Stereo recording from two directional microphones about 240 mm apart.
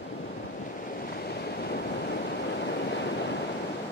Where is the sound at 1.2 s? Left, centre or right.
Left.